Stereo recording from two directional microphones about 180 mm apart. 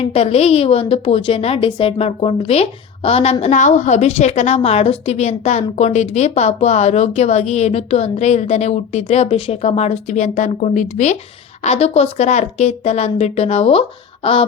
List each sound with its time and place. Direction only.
0.0 s a woman's voice: 35° left (ahead or behind)